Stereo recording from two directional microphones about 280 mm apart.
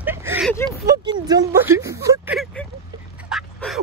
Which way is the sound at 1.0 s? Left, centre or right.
Centre.